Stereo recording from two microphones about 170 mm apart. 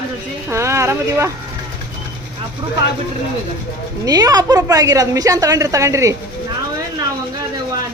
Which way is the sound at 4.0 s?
20° right (ahead or behind).